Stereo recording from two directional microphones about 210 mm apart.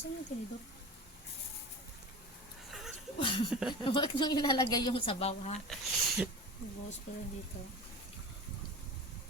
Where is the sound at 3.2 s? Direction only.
25° left (ahead or behind).